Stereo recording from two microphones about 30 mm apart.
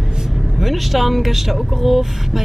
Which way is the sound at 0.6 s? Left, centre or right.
Centre.